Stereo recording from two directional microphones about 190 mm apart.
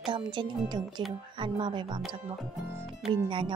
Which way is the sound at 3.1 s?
25° right (ahead or behind).